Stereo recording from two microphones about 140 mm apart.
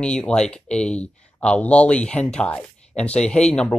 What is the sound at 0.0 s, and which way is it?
Speech, 5° left (ahead or behind).